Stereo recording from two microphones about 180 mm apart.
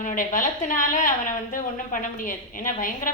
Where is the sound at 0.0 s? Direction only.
50° left (ahead or behind).